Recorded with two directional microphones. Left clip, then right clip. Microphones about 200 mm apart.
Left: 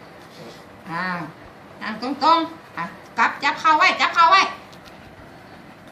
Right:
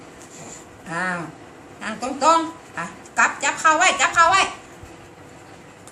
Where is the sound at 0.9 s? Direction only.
15° right (ahead or behind).